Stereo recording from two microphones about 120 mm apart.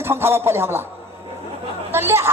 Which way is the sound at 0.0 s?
20° right (ahead or behind).